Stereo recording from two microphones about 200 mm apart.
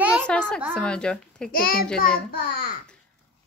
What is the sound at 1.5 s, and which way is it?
A child's voice, 45° left (ahead or behind).